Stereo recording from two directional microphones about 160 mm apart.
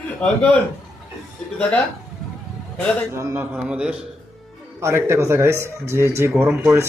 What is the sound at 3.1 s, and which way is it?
Speech, 15° right (ahead or behind).